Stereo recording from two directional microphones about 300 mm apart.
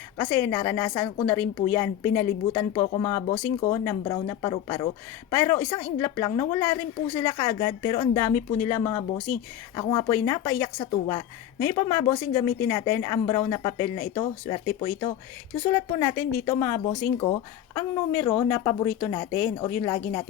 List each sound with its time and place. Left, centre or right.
0.2 s a woman's voice: centre
17.7 s a woman's voice: centre